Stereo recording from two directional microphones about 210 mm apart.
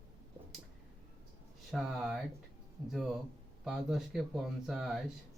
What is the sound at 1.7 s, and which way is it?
Speech, centre (ahead or behind).